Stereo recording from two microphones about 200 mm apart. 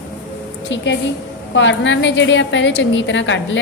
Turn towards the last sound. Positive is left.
turn(degrees=65)  # may be behind; listen again after turning